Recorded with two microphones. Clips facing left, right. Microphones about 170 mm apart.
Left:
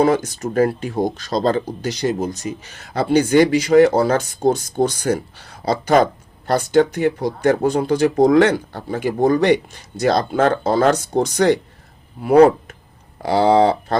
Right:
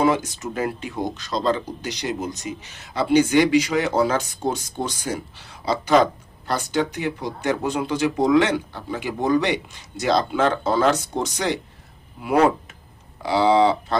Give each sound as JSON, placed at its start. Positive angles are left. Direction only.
{"t": 0.0, "sound": "speech", "side_deg": 45}
{"t": 5.5, "sound": "speech", "side_deg": 45}